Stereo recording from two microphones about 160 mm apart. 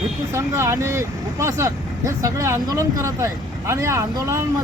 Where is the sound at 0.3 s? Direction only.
15° right (ahead or behind).